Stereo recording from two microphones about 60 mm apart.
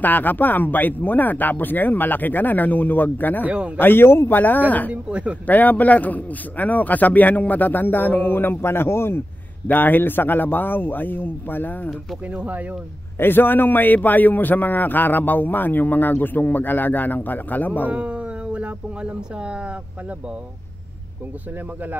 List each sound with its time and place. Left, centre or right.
0.0 s a man's voice: left
3.4 s speech: right
3.7 s a man's voice: left
9.7 s a man's voice: left
12.4 s speech: right
13.2 s a man's voice: left
17.8 s speech: right